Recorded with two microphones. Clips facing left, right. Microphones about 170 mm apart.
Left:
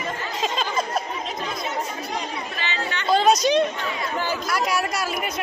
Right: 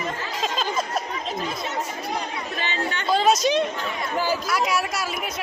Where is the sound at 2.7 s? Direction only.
50° right (ahead or behind).